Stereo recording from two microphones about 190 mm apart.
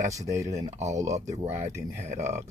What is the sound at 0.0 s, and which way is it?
Speech, 15° right (ahead or behind).